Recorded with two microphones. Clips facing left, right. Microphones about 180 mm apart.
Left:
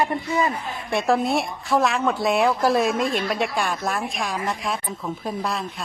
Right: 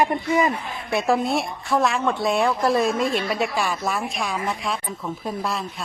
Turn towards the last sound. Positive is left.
turn(degrees=0)  # may be behind; listen again after turning